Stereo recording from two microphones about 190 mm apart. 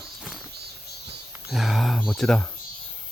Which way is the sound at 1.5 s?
Centre (ahead or behind).